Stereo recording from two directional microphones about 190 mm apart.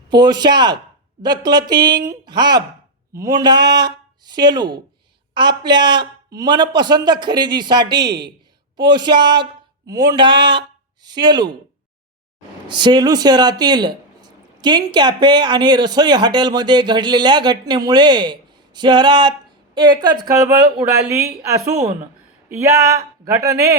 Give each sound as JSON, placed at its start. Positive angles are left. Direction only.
{"t": 0.2, "sound": "speech", "side_deg": -20}
{"t": 12.6, "sound": "speech", "side_deg": -25}